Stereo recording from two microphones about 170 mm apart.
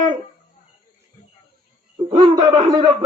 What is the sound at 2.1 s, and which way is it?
Speech, 25° right (ahead or behind).